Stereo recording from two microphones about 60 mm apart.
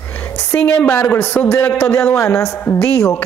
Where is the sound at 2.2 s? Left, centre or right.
Left.